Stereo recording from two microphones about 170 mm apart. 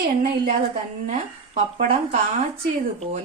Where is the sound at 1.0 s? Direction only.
45° right (ahead or behind).